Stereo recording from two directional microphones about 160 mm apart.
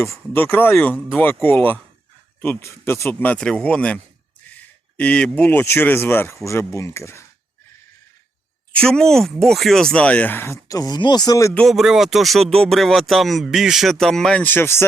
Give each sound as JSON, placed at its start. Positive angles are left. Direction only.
{"t": 0.0, "sound": "speech", "side_deg": 15}
{"t": 8.7, "sound": "speech", "side_deg": 5}
{"t": 11.5, "sound": "speech", "side_deg": 0}